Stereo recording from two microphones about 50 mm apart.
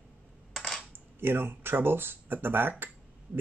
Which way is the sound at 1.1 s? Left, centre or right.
Right.